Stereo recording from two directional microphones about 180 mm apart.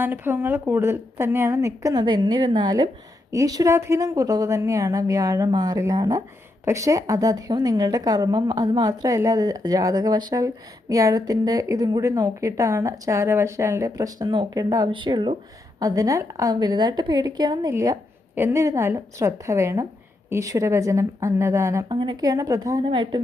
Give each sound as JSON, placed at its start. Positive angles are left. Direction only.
{"t": 0.0, "sound": "a woman's voice", "side_deg": -10}